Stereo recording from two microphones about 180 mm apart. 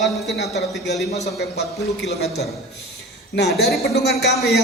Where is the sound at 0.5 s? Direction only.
70° left (ahead or behind).